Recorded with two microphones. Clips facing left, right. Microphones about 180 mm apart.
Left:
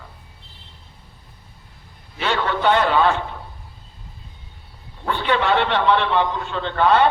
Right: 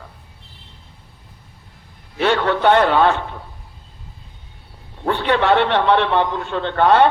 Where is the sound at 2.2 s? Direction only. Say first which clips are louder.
Right 5 dB; 60° right (ahead or behind).